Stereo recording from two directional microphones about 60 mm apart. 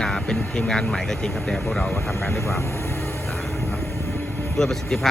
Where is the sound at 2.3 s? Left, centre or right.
Left.